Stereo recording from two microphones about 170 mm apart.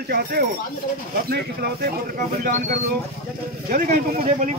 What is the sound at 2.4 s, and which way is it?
Speech, 50° right (ahead or behind).